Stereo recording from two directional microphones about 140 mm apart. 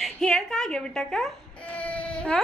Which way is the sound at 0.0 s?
5° left (ahead or behind).